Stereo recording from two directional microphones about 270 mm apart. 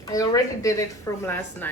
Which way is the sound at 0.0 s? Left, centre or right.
Centre.